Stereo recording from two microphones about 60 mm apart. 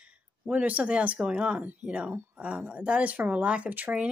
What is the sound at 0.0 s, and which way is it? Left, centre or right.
A woman's voice, right.